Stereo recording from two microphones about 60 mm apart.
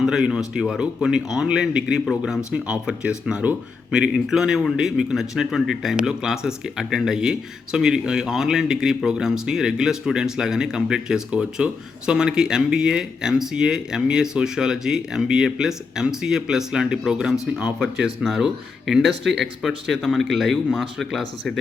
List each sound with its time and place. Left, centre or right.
0.0 s speech: centre